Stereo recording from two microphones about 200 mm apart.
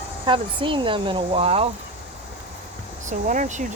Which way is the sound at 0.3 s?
25° right (ahead or behind).